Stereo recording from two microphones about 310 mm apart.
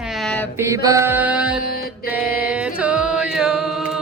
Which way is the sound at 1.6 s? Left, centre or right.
Left.